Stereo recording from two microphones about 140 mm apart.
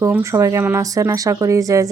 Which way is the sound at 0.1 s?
20° right (ahead or behind).